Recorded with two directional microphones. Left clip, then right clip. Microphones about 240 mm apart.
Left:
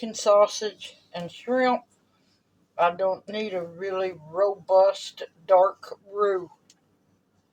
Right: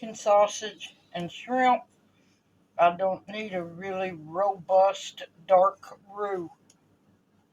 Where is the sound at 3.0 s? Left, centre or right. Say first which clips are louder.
Left 3 dB; left.